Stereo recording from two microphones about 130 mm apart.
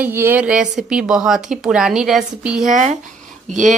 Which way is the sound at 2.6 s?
75° right (ahead or behind).